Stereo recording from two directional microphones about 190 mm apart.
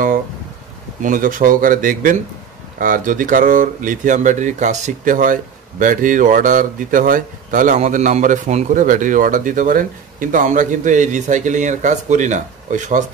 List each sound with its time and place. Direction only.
1.0 s speech: 45° right (ahead or behind)